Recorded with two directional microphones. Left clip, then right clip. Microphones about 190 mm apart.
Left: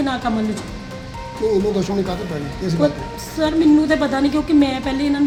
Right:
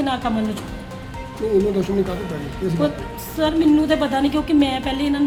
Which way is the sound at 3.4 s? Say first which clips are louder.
Left 2 dB; 5° left (ahead or behind).